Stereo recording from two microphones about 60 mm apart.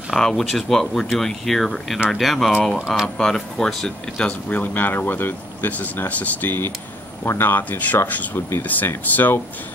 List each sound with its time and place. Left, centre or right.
0.1 s speech: centre
4.3 s speech: left